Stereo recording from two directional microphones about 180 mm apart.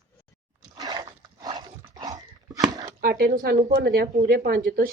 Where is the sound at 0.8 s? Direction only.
20° right (ahead or behind).